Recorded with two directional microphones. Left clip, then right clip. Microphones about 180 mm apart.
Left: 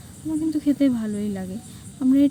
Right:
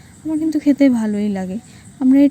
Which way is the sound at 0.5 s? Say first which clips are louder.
Right 8 dB; 40° right (ahead or behind).